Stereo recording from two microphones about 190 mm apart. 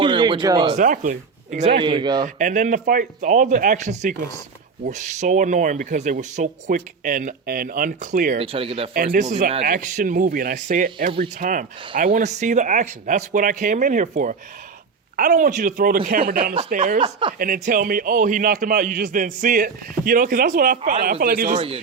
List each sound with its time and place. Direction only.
0.0 s a sound: 25° right (ahead or behind)
0.8 s speech: 45° right (ahead or behind)
1.8 s a man's voice: 25° right (ahead or behind)
2.2 s a man's voice: 40° right (ahead or behind)
8.4 s speech: 30° right (ahead or behind)
9.6 s a man's voice: 45° right (ahead or behind)
17.0 s a man's voice: 25° right (ahead or behind)
17.3 s a man's voice: 45° right (ahead or behind)